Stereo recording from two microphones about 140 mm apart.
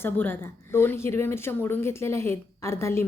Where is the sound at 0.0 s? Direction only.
15° left (ahead or behind).